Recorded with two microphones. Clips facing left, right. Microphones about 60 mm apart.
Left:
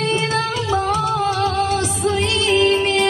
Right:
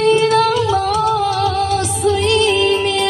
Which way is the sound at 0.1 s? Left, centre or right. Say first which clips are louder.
Right 8 dB; left.